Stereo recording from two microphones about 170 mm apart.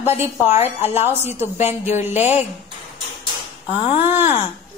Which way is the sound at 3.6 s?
35° left (ahead or behind).